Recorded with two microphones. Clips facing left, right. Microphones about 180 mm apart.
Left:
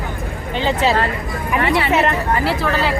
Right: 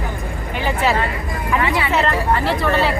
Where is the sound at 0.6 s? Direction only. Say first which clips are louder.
Left 2 dB; 20° left (ahead or behind).